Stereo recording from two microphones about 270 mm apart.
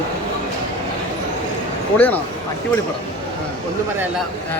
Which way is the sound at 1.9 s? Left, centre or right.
Centre.